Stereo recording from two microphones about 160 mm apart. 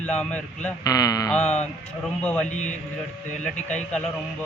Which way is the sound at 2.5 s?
50° left (ahead or behind).